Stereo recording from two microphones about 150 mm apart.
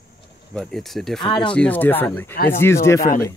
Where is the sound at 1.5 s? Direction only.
10° left (ahead or behind).